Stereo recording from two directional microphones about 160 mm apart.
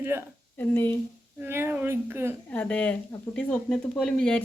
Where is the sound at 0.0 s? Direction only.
15° right (ahead or behind).